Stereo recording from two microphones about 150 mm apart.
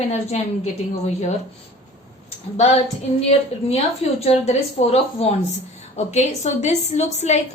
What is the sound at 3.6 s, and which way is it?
A woman's voice, 45° left (ahead or behind).